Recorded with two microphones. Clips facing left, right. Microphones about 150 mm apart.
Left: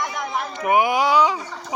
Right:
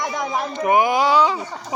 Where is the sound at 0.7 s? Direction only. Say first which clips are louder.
Right 1 dB; 10° left (ahead or behind).